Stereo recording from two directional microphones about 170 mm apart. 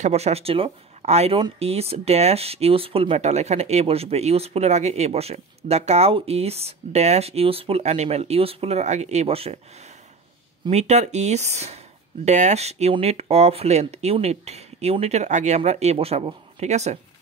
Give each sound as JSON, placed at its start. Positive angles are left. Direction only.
{"t": 0.0, "sound": "speech", "side_deg": -40}
{"t": 10.7, "sound": "speech", "side_deg": -40}